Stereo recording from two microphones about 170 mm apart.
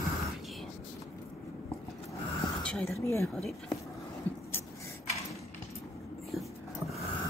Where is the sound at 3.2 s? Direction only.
Centre (ahead or behind).